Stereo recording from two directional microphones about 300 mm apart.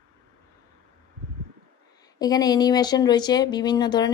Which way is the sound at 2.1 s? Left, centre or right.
Centre.